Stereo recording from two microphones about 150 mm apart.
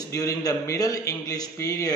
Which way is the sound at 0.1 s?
25° left (ahead or behind).